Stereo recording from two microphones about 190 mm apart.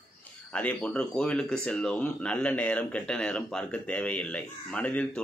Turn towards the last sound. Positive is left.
turn(degrees=5)  # may be behind; listen again after turning